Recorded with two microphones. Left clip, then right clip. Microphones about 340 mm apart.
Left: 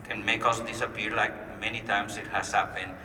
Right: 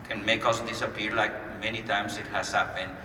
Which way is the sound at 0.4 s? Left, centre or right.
Left.